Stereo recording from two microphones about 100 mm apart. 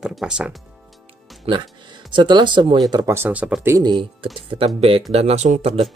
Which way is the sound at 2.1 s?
50° right (ahead or behind).